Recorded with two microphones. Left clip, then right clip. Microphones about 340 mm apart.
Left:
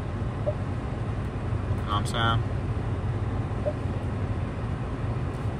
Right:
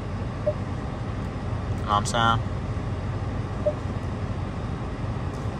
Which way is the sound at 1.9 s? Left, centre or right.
Centre.